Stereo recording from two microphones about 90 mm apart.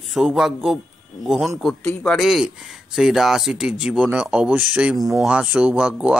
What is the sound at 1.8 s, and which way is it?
Speech, 25° left (ahead or behind).